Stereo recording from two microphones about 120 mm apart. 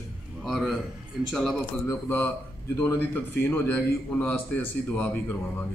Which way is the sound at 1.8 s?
20° left (ahead or behind).